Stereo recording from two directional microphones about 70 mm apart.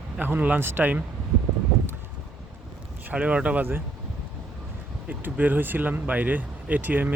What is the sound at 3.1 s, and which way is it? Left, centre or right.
Speech, centre.